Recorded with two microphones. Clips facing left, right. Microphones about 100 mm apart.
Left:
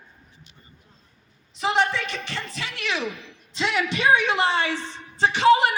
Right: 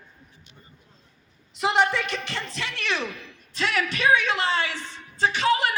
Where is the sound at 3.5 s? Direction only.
25° left (ahead or behind).